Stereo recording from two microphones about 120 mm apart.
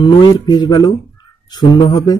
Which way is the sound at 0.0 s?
35° left (ahead or behind).